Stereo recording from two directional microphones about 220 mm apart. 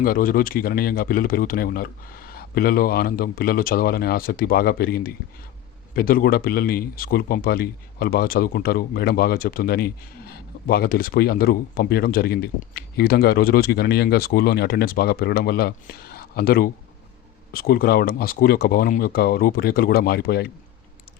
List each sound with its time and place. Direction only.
0.0 s speech: 40° left (ahead or behind)